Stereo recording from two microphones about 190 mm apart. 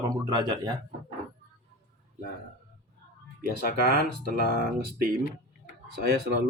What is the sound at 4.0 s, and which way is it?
Speech, 50° right (ahead or behind).